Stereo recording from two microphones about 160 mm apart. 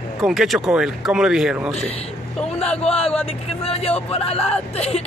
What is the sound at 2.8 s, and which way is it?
Speech, 40° left (ahead or behind).